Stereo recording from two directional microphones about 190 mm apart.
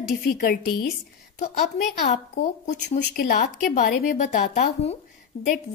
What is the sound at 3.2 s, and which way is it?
A woman's voice, 50° left (ahead or behind).